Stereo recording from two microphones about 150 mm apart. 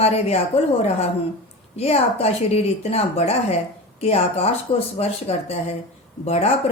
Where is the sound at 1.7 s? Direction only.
45° left (ahead or behind).